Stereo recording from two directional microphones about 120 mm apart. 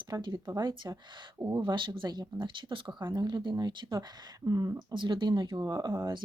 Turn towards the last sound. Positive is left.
turn(degrees=-35)  # may be behind; listen again after turning